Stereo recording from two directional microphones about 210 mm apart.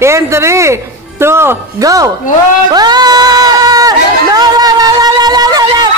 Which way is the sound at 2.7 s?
20° right (ahead or behind).